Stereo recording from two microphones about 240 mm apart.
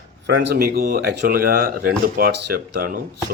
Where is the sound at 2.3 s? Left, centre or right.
Right.